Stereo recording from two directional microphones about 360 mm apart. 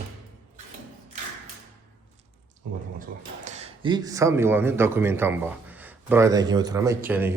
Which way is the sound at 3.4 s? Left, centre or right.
Centre.